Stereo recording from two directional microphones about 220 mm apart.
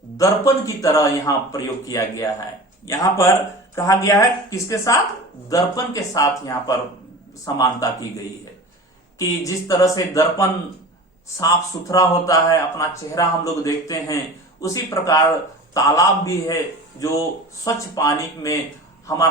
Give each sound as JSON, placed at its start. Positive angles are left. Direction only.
{"t": 0.2, "sound": "a man's voice", "side_deg": 15}
{"t": 9.1, "sound": "a man's voice", "side_deg": 15}
{"t": 11.9, "sound": "a man's voice", "side_deg": 15}
{"t": 17.6, "sound": "a man's voice", "side_deg": 15}